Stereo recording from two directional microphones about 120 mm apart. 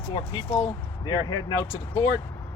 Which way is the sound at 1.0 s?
35° left (ahead or behind).